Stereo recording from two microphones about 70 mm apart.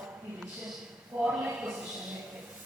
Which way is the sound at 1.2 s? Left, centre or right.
Centre.